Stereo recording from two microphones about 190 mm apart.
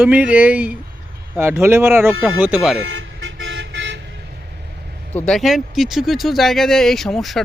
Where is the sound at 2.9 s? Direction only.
70° right (ahead or behind).